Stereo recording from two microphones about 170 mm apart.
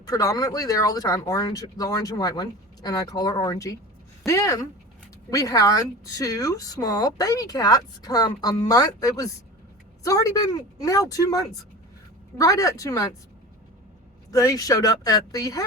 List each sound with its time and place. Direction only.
0.0 s speech: 20° left (ahead or behind)
14.3 s speech: 20° left (ahead or behind)